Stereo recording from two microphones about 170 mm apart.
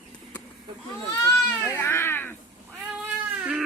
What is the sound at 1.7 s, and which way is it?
Baby cry, 15° left (ahead or behind).